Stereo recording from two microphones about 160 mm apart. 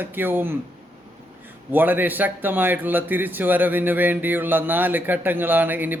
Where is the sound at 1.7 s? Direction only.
10° right (ahead or behind).